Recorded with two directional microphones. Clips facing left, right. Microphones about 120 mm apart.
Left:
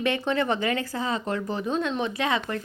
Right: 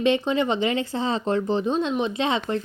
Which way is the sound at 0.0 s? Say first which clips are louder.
Right 4 dB; 20° right (ahead or behind).